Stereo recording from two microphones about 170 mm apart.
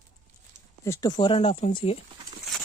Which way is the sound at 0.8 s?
20° left (ahead or behind).